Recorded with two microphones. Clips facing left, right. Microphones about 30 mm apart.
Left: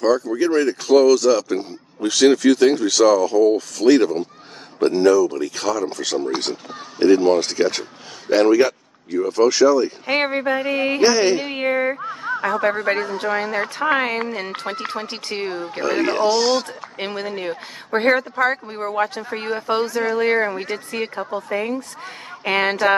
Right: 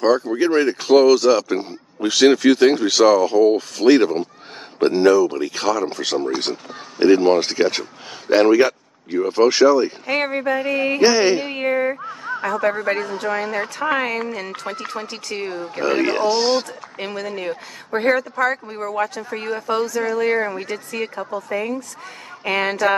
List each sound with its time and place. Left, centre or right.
0.0 s speech: right
9.1 s speech: right
10.0 s a sound: centre
11.0 s speech: centre
11.5 s a sound: centre
12.0 s speech: left
12.4 s a sound: centre
13.2 s speech: centre
15.8 s speech: centre
17.0 s speech: left
17.9 s speech: left
22.4 s speech: left